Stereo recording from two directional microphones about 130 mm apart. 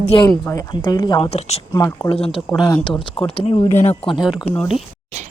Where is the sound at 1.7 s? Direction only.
20° left (ahead or behind).